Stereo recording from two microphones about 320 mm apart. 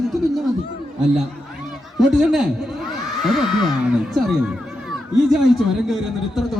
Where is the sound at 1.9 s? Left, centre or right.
Centre.